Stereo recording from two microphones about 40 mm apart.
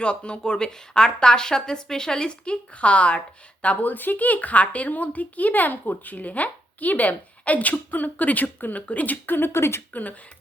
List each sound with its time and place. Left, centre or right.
0.0 s speech: left
3.8 s a woman's voice: left
9.2 s speech: left
9.9 s speech: left